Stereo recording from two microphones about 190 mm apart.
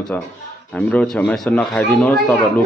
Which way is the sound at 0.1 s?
10° left (ahead or behind).